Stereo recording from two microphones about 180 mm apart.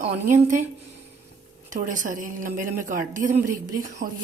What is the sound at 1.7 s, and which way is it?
A woman's voice, 45° right (ahead or behind).